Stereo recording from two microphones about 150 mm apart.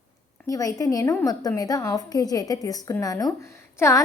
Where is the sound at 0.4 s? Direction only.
25° left (ahead or behind).